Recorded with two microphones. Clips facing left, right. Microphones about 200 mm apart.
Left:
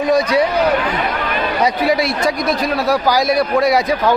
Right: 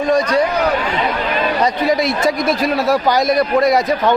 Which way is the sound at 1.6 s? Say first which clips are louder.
Left 1 dB; 5° left (ahead or behind).